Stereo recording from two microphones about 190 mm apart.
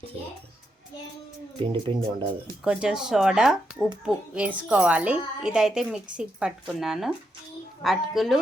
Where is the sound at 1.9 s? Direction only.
30° right (ahead or behind).